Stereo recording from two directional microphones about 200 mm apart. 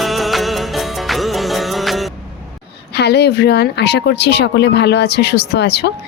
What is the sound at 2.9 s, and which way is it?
Speech, 55° left (ahead or behind).